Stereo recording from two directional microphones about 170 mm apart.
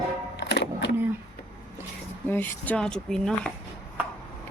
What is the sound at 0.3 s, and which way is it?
Music, 90° left.